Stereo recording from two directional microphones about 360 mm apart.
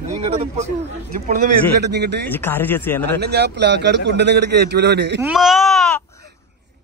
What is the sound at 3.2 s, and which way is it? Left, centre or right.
A man's voice, right.